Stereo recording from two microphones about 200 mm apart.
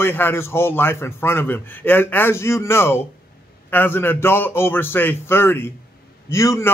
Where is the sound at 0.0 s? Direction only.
10° left (ahead or behind).